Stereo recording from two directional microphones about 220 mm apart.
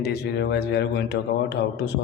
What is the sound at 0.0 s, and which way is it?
A man's voice, 50° left (ahead or behind).